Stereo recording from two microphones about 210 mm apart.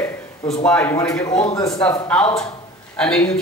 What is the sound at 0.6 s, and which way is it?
Speech, 10° left (ahead or behind).